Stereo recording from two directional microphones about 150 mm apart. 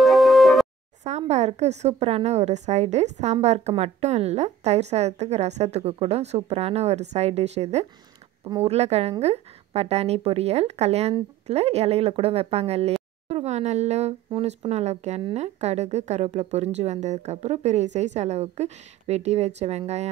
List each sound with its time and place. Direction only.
0.0 s music: centre (ahead or behind)
1.0 s speech: 50° right (ahead or behind)